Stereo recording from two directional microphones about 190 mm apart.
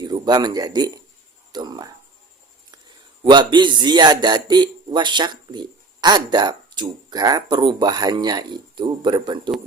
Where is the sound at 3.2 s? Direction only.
25° right (ahead or behind).